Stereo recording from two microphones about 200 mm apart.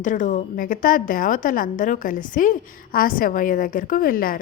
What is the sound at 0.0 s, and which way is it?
A woman's voice, 40° left (ahead or behind).